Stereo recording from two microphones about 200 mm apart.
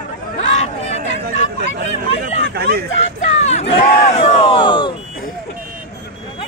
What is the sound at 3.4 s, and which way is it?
Speech, 35° left (ahead or behind).